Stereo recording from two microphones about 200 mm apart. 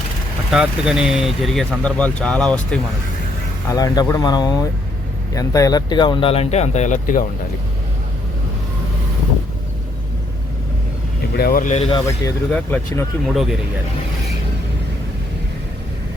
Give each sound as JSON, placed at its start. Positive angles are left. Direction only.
{"t": 0.5, "sound": "speech", "side_deg": -5}
{"t": 3.7, "sound": "speech", "side_deg": 15}
{"t": 11.3, "sound": "speech", "side_deg": 45}
{"t": 12.5, "sound": "speech", "side_deg": 5}